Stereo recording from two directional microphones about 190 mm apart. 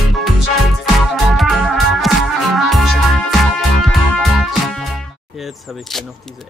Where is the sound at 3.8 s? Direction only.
Centre (ahead or behind).